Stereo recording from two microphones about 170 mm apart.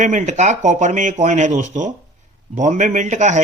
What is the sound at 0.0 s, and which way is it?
Speech, 45° right (ahead or behind).